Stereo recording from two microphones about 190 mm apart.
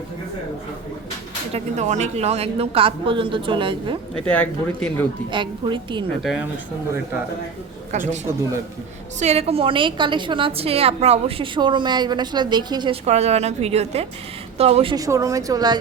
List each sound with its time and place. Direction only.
1.5 s a woman's voice: 35° right (ahead or behind)
4.1 s speech: 5° left (ahead or behind)
5.3 s a woman's voice: 25° right (ahead or behind)
7.9 s a woman's voice: 40° right (ahead or behind)
9.1 s a woman's voice: 35° right (ahead or behind)
13.1 s a woman's voice: 35° right (ahead or behind)
14.9 s speech: 15° right (ahead or behind)